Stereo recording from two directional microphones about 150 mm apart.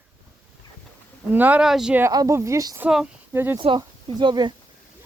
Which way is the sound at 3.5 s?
35° right (ahead or behind).